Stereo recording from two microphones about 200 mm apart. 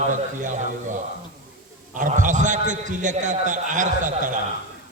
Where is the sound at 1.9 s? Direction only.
40° right (ahead or behind).